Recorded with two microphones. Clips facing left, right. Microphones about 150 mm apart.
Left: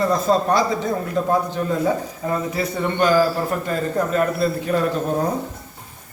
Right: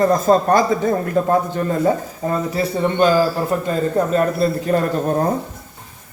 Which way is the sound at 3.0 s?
25° right (ahead or behind).